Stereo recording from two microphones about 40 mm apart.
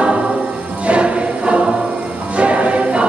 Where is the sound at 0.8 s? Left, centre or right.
Right.